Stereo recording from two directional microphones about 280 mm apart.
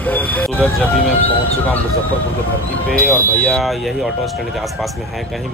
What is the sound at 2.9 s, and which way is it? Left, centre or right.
Speech, centre.